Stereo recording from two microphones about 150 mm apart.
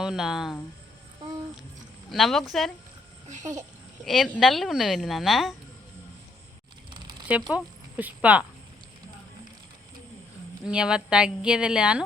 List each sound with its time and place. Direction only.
0.0 s speech: 5° right (ahead or behind)
2.0 s speech: centre (ahead or behind)
3.2 s a child's voice: 55° right (ahead or behind)
4.0 s speech: centre (ahead or behind)
6.9 s a sound: 30° right (ahead or behind)
7.3 s speech: 10° right (ahead or behind)
10.6 s speech: 5° right (ahead or behind)